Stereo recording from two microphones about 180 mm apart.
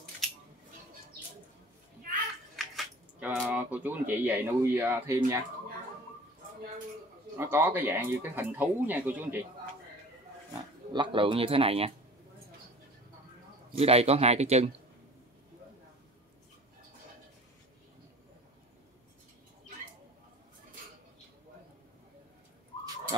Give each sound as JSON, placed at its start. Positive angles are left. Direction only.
{"t": 2.5, "sound": "a sound", "side_deg": 0}
{"t": 7.3, "sound": "speech", "side_deg": -15}
{"t": 10.9, "sound": "speech", "side_deg": -25}
{"t": 13.7, "sound": "speech", "side_deg": -35}